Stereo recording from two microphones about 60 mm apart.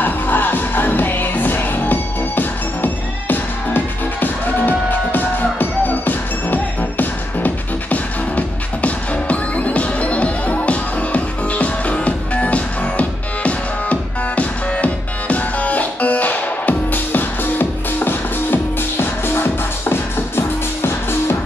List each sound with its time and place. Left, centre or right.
0.0 s music: left